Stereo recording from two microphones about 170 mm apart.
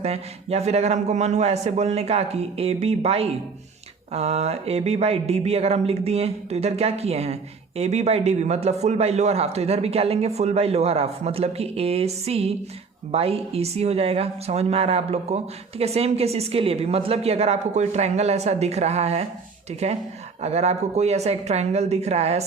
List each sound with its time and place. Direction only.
0.0 s a man's voice: 40° right (ahead or behind)